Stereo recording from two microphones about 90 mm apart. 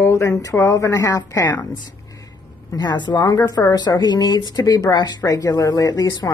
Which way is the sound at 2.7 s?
50° left (ahead or behind).